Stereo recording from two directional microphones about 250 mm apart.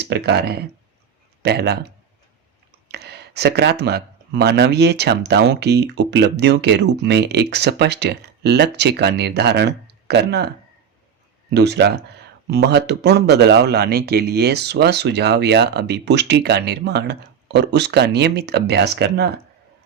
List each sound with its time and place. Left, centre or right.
0.0 s speech: right
2.9 s speech: right
11.5 s speech: right